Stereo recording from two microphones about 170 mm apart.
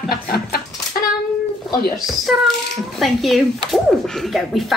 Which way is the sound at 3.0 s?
Centre (ahead or behind).